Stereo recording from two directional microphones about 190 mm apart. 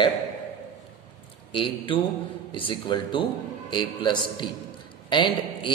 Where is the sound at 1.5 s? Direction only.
25° left (ahead or behind).